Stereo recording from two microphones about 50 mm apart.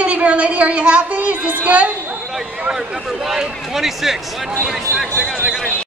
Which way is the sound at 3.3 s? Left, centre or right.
Centre.